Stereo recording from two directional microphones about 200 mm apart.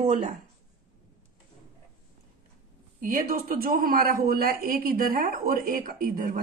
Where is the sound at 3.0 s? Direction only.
45° right (ahead or behind).